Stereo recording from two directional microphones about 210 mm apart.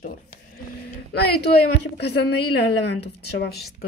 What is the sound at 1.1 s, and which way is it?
Speech, 50° left (ahead or behind).